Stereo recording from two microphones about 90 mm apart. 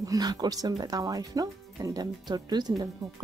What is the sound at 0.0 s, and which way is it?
Speech, 45° right (ahead or behind).